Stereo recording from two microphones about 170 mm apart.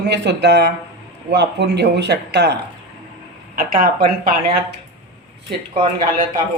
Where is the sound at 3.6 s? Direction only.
55° right (ahead or behind).